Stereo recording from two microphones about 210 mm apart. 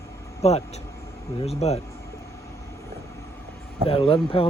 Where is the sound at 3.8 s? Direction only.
25° left (ahead or behind).